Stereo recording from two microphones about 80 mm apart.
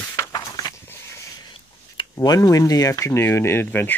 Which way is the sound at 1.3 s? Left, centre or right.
Left.